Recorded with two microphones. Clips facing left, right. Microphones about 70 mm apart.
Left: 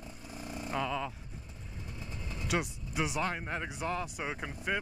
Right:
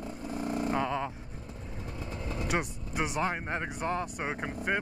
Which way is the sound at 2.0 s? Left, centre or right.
Right.